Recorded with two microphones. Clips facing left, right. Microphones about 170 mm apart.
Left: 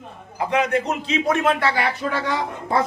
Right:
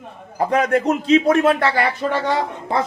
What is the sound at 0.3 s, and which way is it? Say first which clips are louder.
A man's voice: right 3 dB; 45° right (ahead or behind).